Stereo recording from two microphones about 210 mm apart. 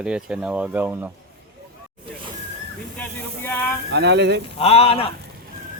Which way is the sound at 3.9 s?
55° right (ahead or behind).